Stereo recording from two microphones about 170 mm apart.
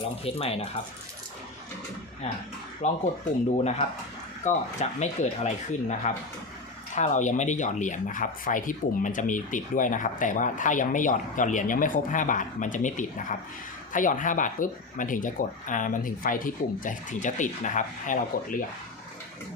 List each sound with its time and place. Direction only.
0.3 s speech: 35° left (ahead or behind)
2.8 s speech: 45° left (ahead or behind)